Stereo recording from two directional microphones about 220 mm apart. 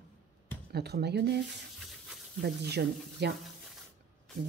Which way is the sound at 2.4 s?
50° right (ahead or behind).